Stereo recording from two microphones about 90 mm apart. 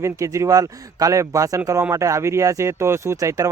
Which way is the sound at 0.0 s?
35° right (ahead or behind).